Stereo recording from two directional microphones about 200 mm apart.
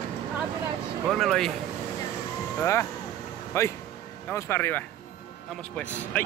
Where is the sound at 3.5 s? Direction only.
15° left (ahead or behind).